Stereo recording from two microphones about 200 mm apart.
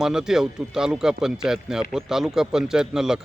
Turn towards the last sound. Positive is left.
turn(degrees=-5)  # may be behind; listen again after turning